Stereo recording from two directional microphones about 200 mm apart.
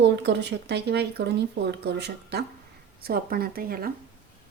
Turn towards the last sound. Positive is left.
turn(degrees=-45)  # may be behind; listen again after turning